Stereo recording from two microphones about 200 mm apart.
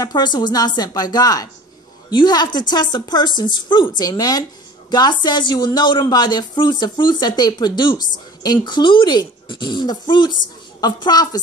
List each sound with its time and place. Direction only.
0.0 s speech: 20° left (ahead or behind)